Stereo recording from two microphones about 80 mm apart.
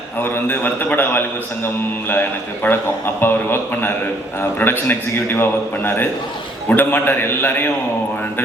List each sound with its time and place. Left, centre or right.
0.2 s a man's voice: left